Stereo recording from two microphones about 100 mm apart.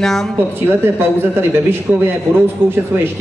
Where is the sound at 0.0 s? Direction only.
5° left (ahead or behind).